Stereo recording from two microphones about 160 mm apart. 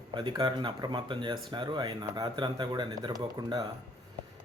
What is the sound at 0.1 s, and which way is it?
Speech, 30° right (ahead or behind).